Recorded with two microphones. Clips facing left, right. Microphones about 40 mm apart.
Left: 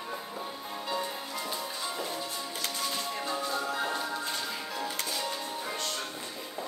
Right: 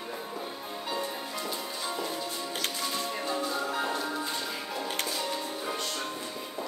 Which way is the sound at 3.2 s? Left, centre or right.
Centre.